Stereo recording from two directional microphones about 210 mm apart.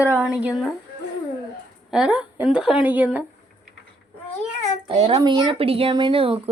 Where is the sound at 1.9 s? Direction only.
5° right (ahead or behind).